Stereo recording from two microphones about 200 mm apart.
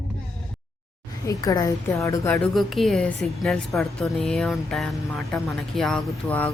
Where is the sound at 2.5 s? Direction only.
Centre (ahead or behind).